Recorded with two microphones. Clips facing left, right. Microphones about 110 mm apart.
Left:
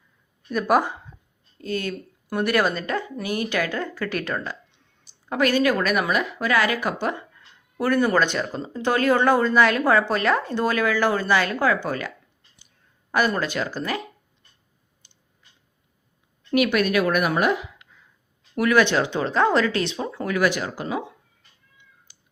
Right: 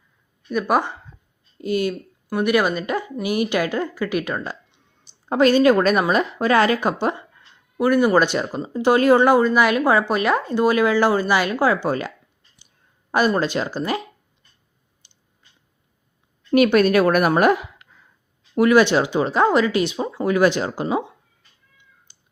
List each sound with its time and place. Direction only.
0.5 s speech: 5° left (ahead or behind)
1.5 s speech: 15° right (ahead or behind)
2.3 s speech: 5° right (ahead or behind); by 3.8 s 20° right (ahead or behind)
3.9 s speech: 5° right (ahead or behind)
5.3 s speech: 25° right (ahead or behind)
7.8 s speech: 10° right (ahead or behind)
10.7 s speech: 20° right (ahead or behind)
13.1 s speech: 20° right (ahead or behind)
16.5 s a woman's voice: 30° right (ahead or behind); by 18.0 s 50° right (ahead or behind)
18.5 s speech: 25° right (ahead or behind); by 20.0 s 5° right (ahead or behind)
20.0 s speech: 20° right (ahead or behind)